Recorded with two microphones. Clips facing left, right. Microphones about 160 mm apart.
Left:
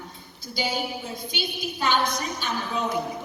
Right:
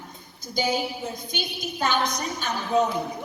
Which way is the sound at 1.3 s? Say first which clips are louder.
Left 1 dB; 45° right (ahead or behind).